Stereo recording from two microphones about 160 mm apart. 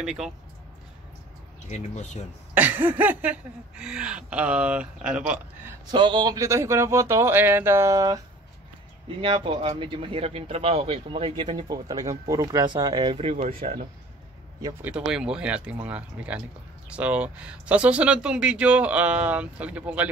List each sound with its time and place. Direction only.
0.0 s speech: 5° right (ahead or behind)
1.7 s speech: 45° left (ahead or behind)
2.5 s speech: 10° right (ahead or behind)
5.9 s speech: 30° right (ahead or behind)
9.2 s a man's voice: 35° right (ahead or behind)
11.7 s speech: 20° right (ahead or behind); by 13.7 s 40° right (ahead or behind)
14.6 s speech: 10° right (ahead or behind)